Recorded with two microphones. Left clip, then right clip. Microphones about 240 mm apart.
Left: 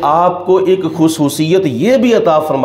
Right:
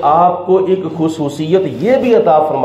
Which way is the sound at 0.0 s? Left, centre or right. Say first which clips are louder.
Right 1 dB; left.